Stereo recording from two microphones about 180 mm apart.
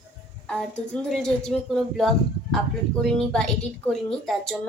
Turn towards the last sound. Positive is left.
turn(degrees=0)  # may be behind; listen again after turning